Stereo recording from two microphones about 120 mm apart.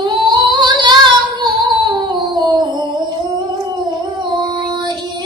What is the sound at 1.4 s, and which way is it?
Music, 35° right (ahead or behind).